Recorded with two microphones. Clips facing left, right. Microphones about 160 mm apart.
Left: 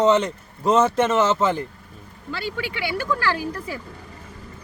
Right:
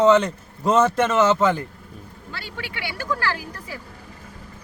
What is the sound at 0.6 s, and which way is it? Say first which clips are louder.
Speech: even; 30° left (ahead or behind).